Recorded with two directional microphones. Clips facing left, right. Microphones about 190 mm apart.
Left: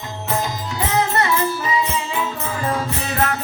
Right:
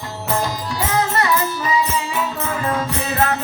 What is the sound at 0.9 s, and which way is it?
Music, 25° left (ahead or behind).